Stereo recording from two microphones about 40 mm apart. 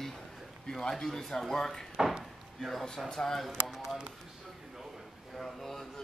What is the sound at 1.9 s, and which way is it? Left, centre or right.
Speech, centre.